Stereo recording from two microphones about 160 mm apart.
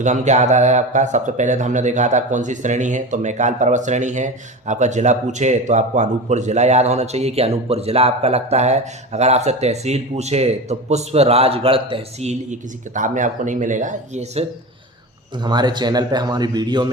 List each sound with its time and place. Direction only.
0.0 s a man's voice: 45° right (ahead or behind)
15.4 s speech: 25° right (ahead or behind)